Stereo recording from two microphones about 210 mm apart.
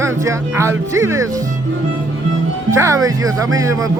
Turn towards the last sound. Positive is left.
turn(degrees=-15)  # may be behind; listen again after turning